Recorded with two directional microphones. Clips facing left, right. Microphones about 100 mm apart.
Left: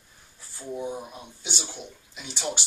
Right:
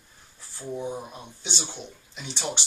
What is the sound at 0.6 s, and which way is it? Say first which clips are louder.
Speech: even; 5° right (ahead or behind).